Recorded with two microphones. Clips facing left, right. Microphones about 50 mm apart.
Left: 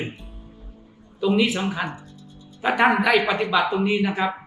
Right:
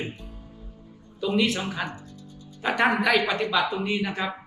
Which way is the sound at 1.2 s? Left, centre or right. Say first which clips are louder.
Left 4 dB; centre.